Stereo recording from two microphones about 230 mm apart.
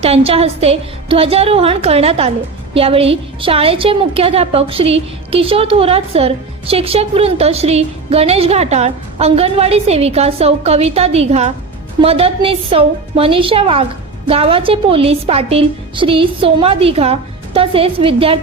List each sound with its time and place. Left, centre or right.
0.0 s a woman's voice: right